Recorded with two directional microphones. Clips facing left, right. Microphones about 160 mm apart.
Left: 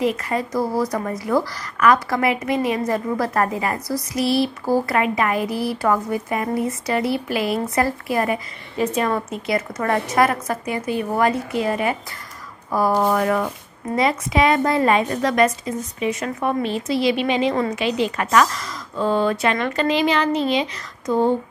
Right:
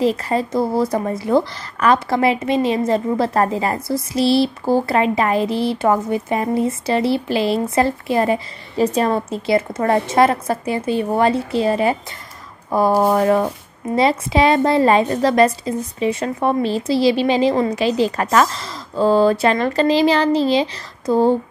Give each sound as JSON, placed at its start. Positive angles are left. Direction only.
{"t": 0.0, "sound": "a woman's voice", "side_deg": -30}